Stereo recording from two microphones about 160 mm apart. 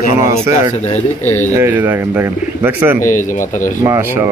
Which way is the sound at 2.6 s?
15° right (ahead or behind).